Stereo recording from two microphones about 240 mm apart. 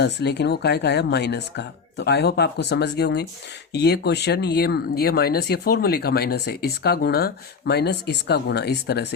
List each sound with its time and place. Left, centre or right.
0.0 s speech: left